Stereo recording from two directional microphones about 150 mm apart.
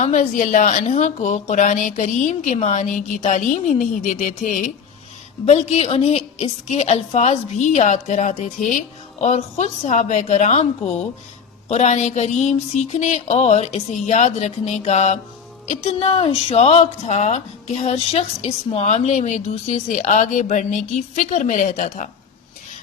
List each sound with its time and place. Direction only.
0.0 s a woman's voice: 60° left (ahead or behind)
5.5 s a sound: 45° left (ahead or behind)
18.7 s a woman's voice: 45° left (ahead or behind)